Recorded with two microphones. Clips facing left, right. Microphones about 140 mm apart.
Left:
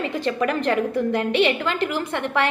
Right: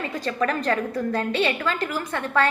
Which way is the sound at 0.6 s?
20° left (ahead or behind).